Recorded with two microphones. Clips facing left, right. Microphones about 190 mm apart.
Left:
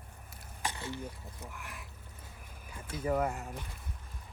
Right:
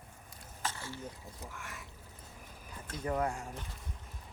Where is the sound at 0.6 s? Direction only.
15° left (ahead or behind).